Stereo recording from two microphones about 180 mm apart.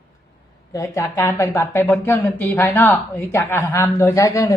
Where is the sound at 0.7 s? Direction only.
15° left (ahead or behind).